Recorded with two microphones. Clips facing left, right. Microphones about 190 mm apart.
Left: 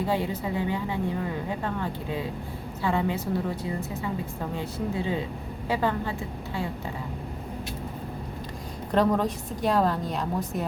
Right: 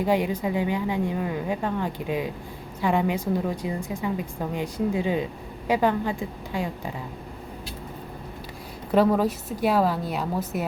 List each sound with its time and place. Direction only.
0.0 s a woman's voice: 15° right (ahead or behind)
8.9 s a woman's voice: 5° right (ahead or behind)